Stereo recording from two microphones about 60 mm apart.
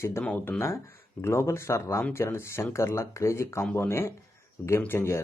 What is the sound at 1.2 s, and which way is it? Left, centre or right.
Speech, left.